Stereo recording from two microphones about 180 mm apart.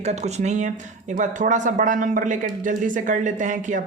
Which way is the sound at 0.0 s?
40° right (ahead or behind).